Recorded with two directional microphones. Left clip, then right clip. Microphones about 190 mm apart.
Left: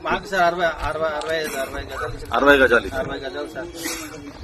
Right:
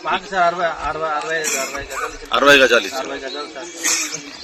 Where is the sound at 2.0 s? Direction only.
45° left (ahead or behind).